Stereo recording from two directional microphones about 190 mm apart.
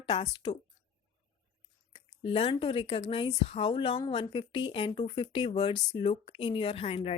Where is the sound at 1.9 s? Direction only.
30° left (ahead or behind).